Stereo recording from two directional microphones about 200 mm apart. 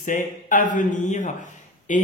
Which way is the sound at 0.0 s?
40° left (ahead or behind).